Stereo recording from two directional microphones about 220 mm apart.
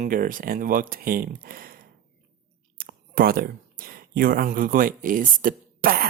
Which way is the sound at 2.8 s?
40° right (ahead or behind).